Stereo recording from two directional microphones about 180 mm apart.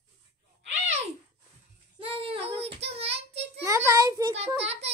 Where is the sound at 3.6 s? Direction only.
15° right (ahead or behind).